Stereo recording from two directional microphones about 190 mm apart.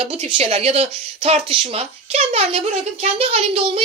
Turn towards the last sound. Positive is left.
turn(degrees=-30)  # may be behind; listen again after turning